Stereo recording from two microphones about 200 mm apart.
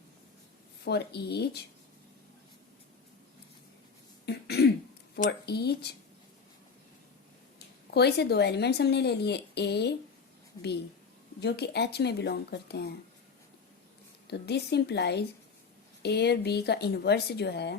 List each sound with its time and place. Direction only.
0.9 s speech: 55° left (ahead or behind)
4.3 s cough: 55° left (ahead or behind)
5.1 s speech: 55° left (ahead or behind)
7.9 s speech: 55° left (ahead or behind)
11.3 s speech: 55° left (ahead or behind)
14.3 s speech: 55° left (ahead or behind)